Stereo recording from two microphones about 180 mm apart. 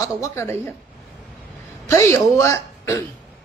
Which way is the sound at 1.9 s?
15° left (ahead or behind).